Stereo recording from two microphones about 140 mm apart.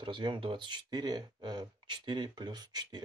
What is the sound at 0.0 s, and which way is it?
Speech, 35° right (ahead or behind).